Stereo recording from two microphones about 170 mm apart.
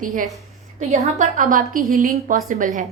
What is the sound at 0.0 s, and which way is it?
Speech, 55° right (ahead or behind).